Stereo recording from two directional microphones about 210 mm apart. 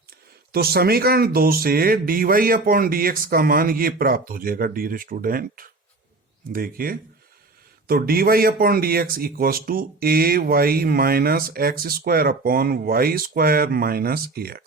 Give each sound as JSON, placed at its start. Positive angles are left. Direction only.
{"t": 0.5, "sound": "speech", "side_deg": -45}